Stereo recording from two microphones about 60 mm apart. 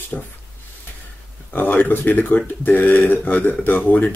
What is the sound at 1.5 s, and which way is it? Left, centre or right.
Speech, left.